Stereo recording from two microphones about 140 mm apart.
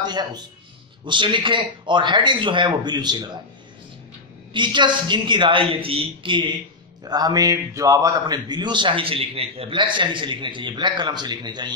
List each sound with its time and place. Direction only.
0.0 s a man's voice: 30° right (ahead or behind)
4.5 s a man's voice: 35° right (ahead or behind)